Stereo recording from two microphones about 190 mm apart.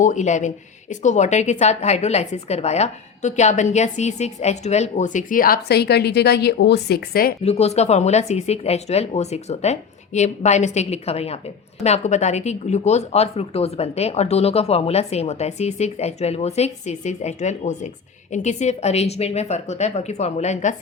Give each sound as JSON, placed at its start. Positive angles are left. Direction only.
{"t": 0.0, "sound": "speech", "side_deg": 40}
{"t": 7.4, "sound": "speech", "side_deg": 35}